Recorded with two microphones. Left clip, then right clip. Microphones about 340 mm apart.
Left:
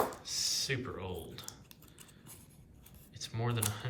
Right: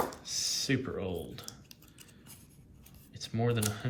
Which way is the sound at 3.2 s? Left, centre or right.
Centre.